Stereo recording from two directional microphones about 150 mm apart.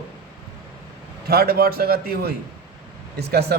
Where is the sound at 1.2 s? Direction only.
90° right.